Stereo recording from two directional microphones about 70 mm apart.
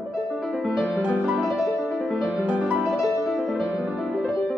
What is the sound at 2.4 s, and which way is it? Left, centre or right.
Music, right.